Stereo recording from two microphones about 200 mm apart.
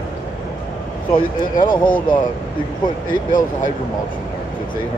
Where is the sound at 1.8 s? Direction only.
45° left (ahead or behind).